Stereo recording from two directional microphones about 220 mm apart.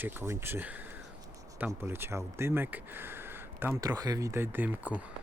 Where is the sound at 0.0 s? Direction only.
10° right (ahead or behind).